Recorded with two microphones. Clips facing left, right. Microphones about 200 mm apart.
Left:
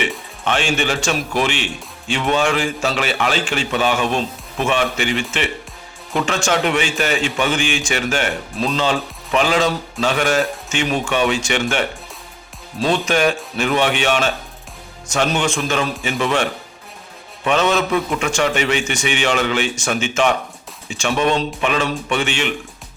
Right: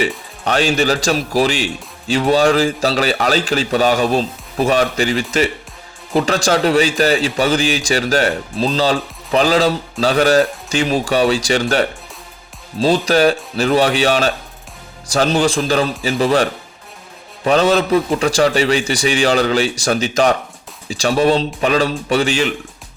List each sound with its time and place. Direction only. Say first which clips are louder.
0.4 s speech: right 4 dB; 40° right (ahead or behind)